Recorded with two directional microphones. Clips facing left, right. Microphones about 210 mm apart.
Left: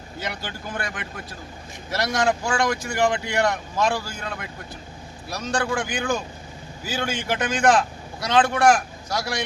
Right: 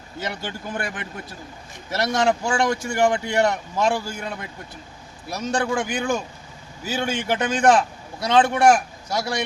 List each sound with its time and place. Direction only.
0.2 s speech: 20° right (ahead or behind)
1.9 s speech: 25° right (ahead or behind)